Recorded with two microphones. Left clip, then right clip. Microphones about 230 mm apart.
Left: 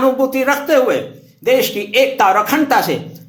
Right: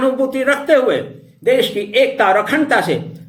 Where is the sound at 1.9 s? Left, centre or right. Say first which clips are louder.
Left 1 dB; left.